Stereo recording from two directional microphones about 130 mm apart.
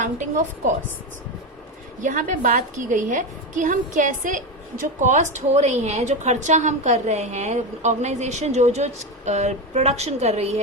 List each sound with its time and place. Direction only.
0.0 s a woman's voice: 70° right (ahead or behind)
2.0 s a woman's voice: 80° right; by 10.6 s 55° right (ahead or behind)